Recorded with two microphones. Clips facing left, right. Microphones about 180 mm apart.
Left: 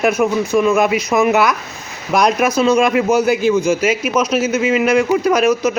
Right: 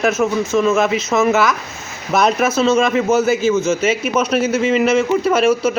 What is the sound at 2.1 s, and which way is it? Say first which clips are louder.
Speech: left 1 dB; 5° right (ahead or behind).